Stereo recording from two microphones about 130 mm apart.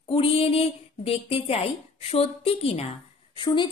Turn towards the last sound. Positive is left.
turn(degrees=40)  # may be behind; listen again after turning